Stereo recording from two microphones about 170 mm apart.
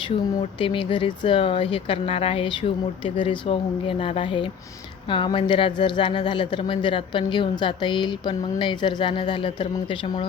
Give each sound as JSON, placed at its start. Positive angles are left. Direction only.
{"t": 0.6, "sound": "speech", "side_deg": 30}